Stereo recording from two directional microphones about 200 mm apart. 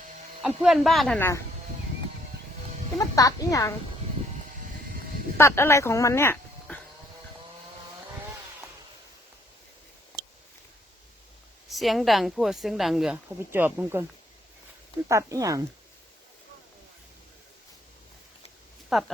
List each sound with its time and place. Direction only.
0.4 s speech: 5° right (ahead or behind)
3.0 s speech: 15° left (ahead or behind)
5.4 s speech: 10° left (ahead or behind)
11.7 s speech: centre (ahead or behind)
15.1 s speech: 15° right (ahead or behind)
18.9 s speech: centre (ahead or behind)